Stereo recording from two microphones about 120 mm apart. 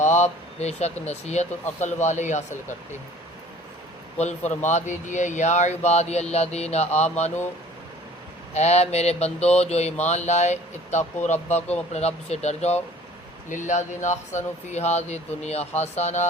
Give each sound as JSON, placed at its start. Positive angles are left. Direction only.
{"t": 0.0, "sound": "speech", "side_deg": 70}
{"t": 1.8, "sound": "speech", "side_deg": 80}
{"t": 4.2, "sound": "speech", "side_deg": 75}
{"t": 8.5, "sound": "a sound", "side_deg": 65}
{"t": 9.6, "sound": "speech", "side_deg": 65}
{"t": 11.9, "sound": "a sound", "side_deg": 65}
{"t": 13.5, "sound": "speech", "side_deg": 85}